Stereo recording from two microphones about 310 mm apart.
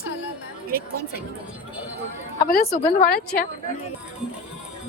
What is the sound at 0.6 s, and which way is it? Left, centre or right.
Speech, right.